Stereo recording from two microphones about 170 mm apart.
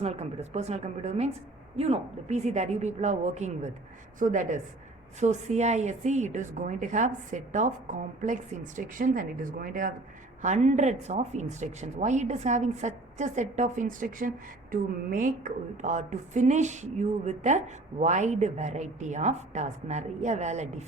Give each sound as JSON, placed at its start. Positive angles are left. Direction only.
{"t": 0.0, "sound": "speech", "side_deg": -40}